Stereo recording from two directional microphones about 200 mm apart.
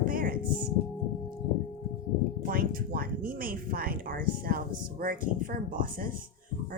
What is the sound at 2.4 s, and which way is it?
Speech, 45° right (ahead or behind).